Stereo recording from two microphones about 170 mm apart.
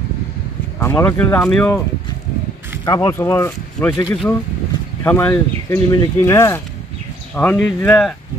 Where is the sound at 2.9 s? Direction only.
15° left (ahead or behind).